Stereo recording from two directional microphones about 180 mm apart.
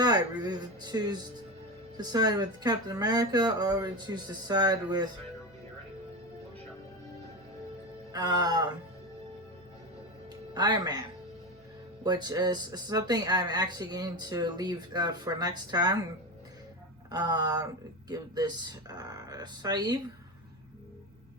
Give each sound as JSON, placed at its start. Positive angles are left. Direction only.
{"t": 0.4, "sound": "speech", "side_deg": -25}
{"t": 8.1, "sound": "speech", "side_deg": -25}
{"t": 10.5, "sound": "speech", "side_deg": -25}
{"t": 12.0, "sound": "speech", "side_deg": -20}
{"t": 17.1, "sound": "speech", "side_deg": -20}